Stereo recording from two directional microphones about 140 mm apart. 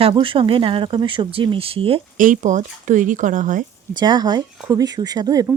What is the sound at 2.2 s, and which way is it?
A woman's voice, 65° right (ahead or behind).